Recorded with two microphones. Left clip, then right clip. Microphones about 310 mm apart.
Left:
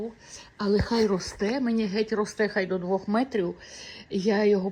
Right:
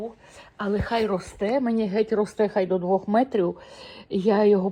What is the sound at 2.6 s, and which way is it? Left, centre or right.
Speech, right.